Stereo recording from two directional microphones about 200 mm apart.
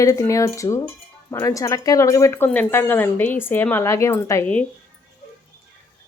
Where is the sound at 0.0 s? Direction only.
15° left (ahead or behind).